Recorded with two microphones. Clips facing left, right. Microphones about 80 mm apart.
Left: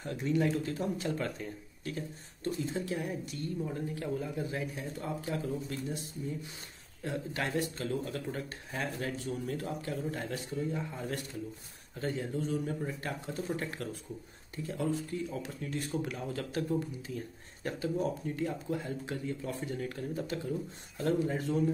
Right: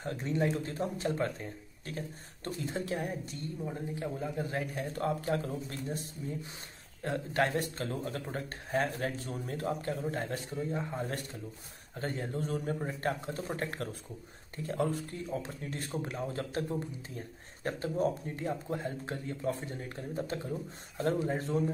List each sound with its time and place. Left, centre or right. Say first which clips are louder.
0.0 s speech: left 1 dB; right
3.6 s speech: left 1 dB; right
4.4 s speech: right 1 dB; right
17.6 s speech: right 1 dB; right